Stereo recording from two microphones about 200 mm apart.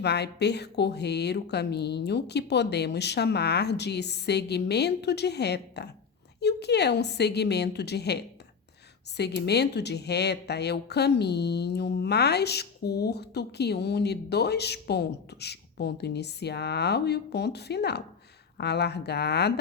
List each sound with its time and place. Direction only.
0.0 s speech: 55° left (ahead or behind)